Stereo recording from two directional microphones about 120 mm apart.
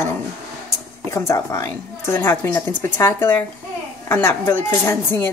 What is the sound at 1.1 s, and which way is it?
Speech, 25° left (ahead or behind).